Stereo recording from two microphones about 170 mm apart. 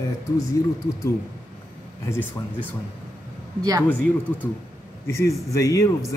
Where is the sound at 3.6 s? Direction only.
20° right (ahead or behind).